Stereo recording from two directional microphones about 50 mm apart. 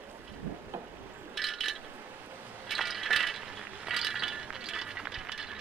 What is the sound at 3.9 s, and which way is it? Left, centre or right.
Chink, centre.